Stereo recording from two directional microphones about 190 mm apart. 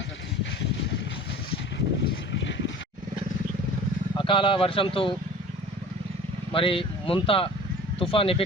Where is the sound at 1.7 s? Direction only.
75° left (ahead or behind).